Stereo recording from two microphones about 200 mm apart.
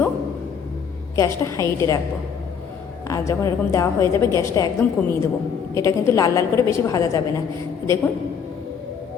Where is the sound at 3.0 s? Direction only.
15° left (ahead or behind).